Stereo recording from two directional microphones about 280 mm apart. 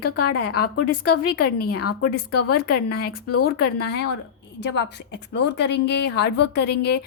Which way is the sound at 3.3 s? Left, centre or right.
Left.